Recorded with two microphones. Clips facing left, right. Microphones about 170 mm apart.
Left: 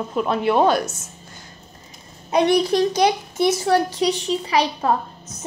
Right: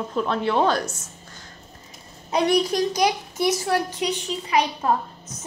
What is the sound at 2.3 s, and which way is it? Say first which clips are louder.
A child's voice: left 3 dB; 25° left (ahead or behind).